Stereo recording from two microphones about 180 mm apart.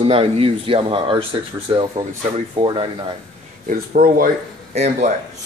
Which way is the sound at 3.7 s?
45° right (ahead or behind).